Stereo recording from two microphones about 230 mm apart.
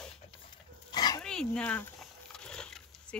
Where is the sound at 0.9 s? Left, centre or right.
Centre.